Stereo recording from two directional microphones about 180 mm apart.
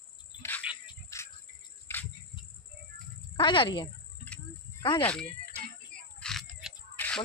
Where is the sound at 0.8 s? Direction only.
15° left (ahead or behind).